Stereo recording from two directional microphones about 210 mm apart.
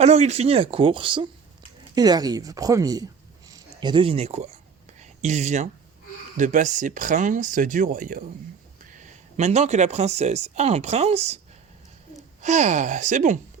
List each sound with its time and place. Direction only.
0.0 s speech: 30° right (ahead or behind)
4.9 s a sound: 35° right (ahead or behind)
6.3 s speech: 35° right (ahead or behind)
12.4 s speech: 35° right (ahead or behind)